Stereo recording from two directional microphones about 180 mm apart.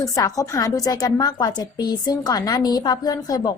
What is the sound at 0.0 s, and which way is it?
A woman's voice, 20° left (ahead or behind).